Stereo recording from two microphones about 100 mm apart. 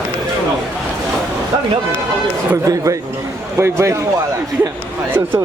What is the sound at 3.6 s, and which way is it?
Speech, 30° right (ahead or behind).